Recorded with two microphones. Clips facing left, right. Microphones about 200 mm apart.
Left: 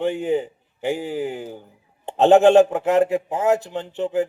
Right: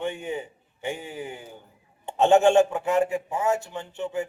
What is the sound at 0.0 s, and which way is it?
Speech, 35° left (ahead or behind).